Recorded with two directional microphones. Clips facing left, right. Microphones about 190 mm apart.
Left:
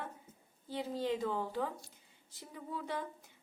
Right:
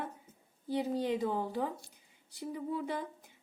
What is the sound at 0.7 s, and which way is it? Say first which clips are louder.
A woman's voice: right 4 dB; 15° right (ahead or behind).